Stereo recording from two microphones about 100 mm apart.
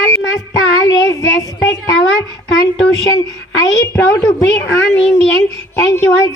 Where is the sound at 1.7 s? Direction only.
30° left (ahead or behind).